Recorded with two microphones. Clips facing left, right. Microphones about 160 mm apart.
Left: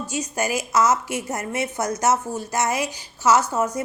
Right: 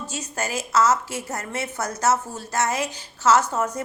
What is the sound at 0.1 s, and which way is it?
A woman's voice, 15° left (ahead or behind).